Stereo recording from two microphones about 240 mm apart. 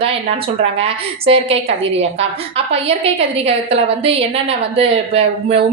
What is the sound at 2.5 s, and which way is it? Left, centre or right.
A woman's voice, right.